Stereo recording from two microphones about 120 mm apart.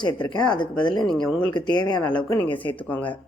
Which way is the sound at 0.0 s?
40° left (ahead or behind).